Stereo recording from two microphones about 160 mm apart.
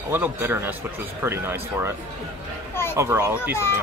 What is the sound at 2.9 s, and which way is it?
Speech, 15° right (ahead or behind).